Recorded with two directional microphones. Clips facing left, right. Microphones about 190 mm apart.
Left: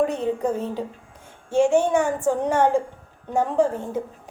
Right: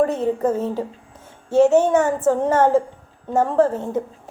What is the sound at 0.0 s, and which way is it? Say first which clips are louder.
A woman's voice: right 3 dB; 15° left (ahead or behind).